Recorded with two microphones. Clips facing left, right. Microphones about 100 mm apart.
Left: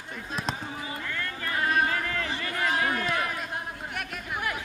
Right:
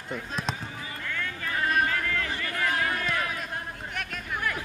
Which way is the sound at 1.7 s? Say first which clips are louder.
Even; 30° left (ahead or behind).